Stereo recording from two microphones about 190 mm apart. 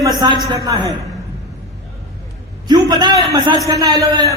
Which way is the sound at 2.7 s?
20° right (ahead or behind).